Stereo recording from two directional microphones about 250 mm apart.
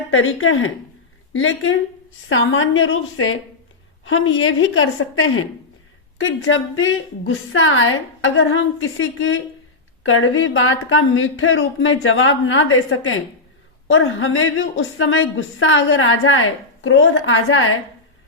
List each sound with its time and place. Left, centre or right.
0.1 s speech: left